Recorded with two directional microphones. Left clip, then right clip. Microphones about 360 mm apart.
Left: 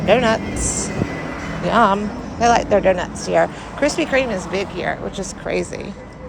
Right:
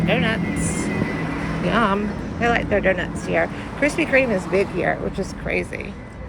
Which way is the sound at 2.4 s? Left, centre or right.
Centre.